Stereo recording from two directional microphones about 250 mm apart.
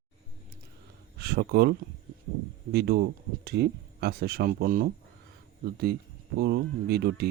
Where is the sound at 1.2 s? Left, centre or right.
Right.